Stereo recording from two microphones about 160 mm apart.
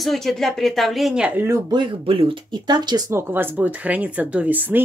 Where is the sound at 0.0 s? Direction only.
Centre (ahead or behind).